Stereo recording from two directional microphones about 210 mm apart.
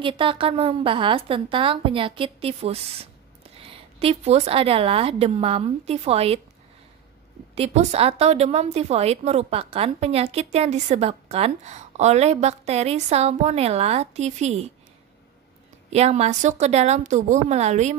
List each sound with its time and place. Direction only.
0.0 s a woman's voice: 25° right (ahead or behind)
7.5 s a woman's voice: 30° right (ahead or behind)
15.9 s a woman's voice: 30° right (ahead or behind)